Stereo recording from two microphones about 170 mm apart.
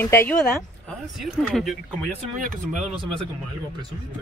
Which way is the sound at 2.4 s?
45° right (ahead or behind).